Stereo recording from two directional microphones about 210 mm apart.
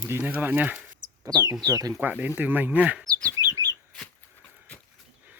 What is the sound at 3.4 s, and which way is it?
Bird, 15° right (ahead or behind).